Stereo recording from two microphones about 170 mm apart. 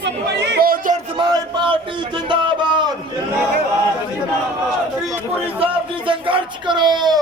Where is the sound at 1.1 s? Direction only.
30° right (ahead or behind).